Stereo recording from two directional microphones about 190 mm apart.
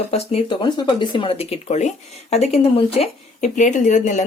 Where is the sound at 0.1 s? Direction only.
35° left (ahead or behind).